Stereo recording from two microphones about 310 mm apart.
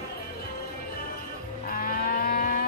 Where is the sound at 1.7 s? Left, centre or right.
Left.